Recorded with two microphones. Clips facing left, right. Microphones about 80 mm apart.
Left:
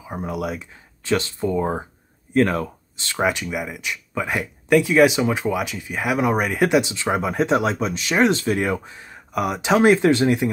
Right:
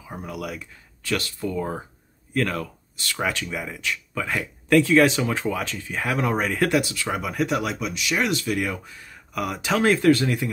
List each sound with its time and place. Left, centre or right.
0.0 s speech: left